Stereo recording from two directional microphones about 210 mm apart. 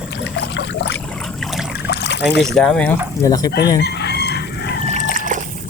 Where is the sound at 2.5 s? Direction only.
5° left (ahead or behind).